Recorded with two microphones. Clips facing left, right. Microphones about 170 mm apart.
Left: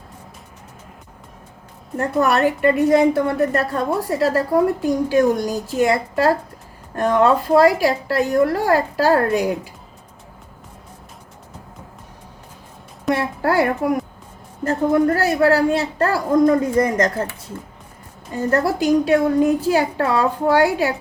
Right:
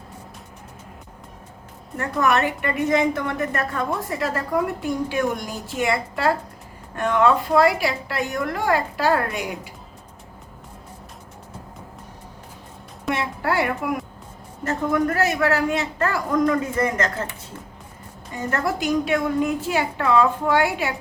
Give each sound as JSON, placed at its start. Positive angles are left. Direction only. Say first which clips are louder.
{"t": 2.0, "sound": "a woman's voice", "louder": "left 4 dB", "side_deg": 35}
{"t": 13.1, "sound": "a woman's voice", "louder": "left 5 dB", "side_deg": 40}
{"t": 18.5, "sound": "a woman's voice", "louder": "left 6 dB", "side_deg": 35}